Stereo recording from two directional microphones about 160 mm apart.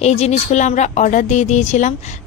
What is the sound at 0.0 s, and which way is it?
Speech, 40° left (ahead or behind).